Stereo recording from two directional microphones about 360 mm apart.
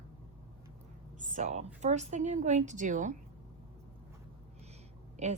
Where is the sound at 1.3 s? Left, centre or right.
Centre.